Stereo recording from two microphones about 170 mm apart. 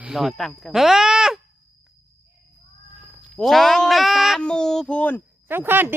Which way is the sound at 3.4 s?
Centre (ahead or behind).